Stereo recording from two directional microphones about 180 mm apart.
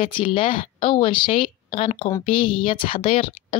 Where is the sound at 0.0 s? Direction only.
30° left (ahead or behind).